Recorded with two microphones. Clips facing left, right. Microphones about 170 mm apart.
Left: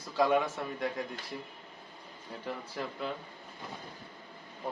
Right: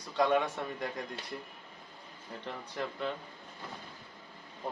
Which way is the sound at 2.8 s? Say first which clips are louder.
Right 3 dB; centre (ahead or behind).